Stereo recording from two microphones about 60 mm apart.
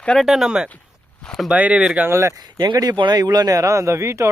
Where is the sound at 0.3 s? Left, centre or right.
Centre.